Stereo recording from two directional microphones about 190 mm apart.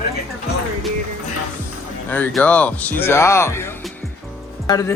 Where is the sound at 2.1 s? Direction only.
10° left (ahead or behind).